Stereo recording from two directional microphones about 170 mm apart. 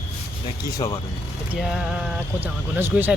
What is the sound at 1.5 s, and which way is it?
Speech, centre (ahead or behind).